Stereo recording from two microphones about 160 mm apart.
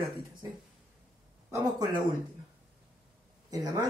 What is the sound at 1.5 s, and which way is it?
Speech, 25° right (ahead or behind).